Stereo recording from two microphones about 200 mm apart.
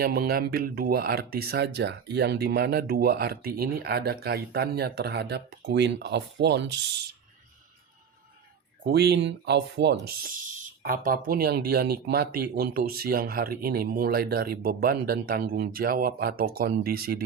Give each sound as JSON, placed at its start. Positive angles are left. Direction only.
{"t": 0.0, "sound": "speech", "side_deg": -50}
{"t": 8.8, "sound": "speech", "side_deg": -55}